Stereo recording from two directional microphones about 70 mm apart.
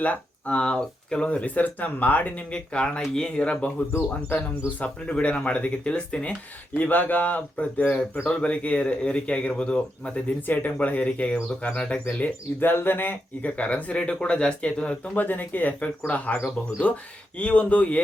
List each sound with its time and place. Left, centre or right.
0.0 s speech: centre
4.8 s speech: centre
10.4 s speech: left
12.1 s speech: left